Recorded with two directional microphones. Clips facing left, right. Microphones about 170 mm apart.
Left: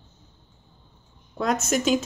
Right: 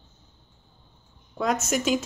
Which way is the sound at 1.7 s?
10° right (ahead or behind).